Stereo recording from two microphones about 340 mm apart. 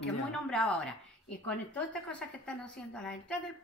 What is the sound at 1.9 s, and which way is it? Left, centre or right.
Speech, centre.